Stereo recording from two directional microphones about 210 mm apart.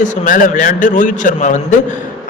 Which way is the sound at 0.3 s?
40° left (ahead or behind).